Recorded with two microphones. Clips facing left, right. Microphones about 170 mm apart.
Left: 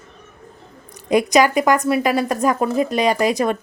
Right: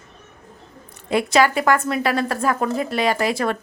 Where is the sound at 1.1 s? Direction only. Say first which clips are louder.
Left 3 dB; 15° left (ahead or behind).